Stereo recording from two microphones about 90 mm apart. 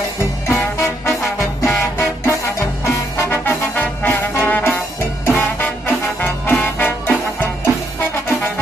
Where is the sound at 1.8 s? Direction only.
30° left (ahead or behind).